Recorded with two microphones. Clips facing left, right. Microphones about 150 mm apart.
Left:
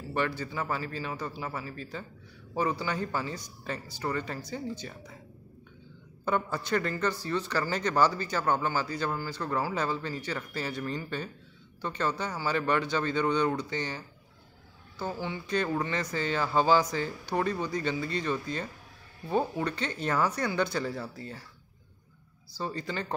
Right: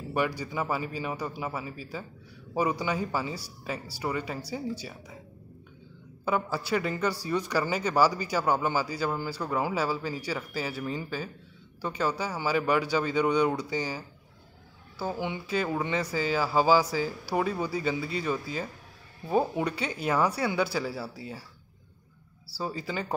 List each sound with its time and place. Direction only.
0.1 s speech: 10° right (ahead or behind)
6.2 s speech: 5° right (ahead or behind)
15.4 s speech: 5° right (ahead or behind)
22.6 s speech: 5° right (ahead or behind)